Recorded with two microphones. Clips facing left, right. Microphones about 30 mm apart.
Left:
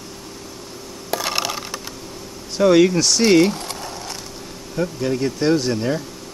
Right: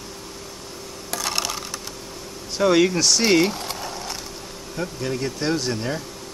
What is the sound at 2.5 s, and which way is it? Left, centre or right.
Speech, centre.